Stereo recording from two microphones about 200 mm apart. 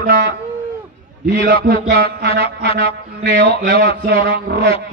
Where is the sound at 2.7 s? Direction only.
30° left (ahead or behind).